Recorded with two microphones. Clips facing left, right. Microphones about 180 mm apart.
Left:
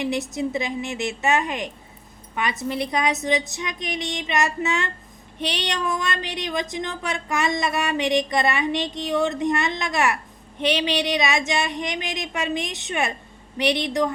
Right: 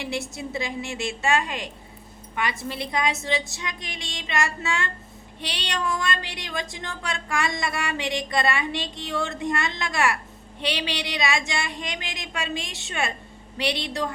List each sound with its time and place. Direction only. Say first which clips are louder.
0.0 s speech: left 6 dB; 20° left (ahead or behind)